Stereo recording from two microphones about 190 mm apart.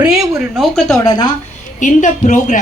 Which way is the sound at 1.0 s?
20° left (ahead or behind).